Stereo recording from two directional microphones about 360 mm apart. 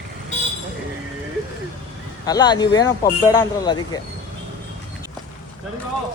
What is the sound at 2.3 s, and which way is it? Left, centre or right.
Speech, centre.